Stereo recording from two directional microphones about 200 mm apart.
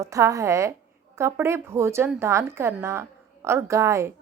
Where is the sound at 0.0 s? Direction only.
15° right (ahead or behind).